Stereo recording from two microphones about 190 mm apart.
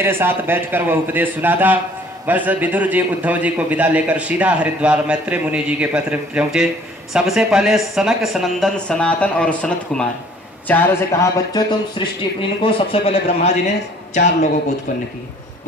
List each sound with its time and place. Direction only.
0.0 s a man's voice: 10° right (ahead or behind); by 14.5 s 40° left (ahead or behind)